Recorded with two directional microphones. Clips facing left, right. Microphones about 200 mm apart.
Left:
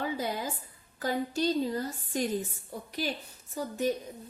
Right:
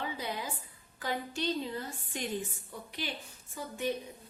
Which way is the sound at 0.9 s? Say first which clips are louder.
Left 6 dB; 40° left (ahead or behind).